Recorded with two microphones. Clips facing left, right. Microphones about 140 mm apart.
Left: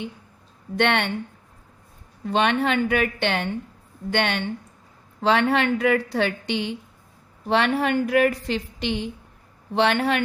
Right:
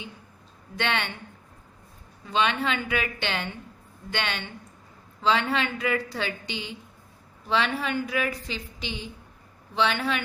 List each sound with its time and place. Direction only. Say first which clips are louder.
0.8 s a woman's voice: left 7 dB; 65° left (ahead or behind)
2.2 s a woman's voice: left 5 dB; 60° left (ahead or behind)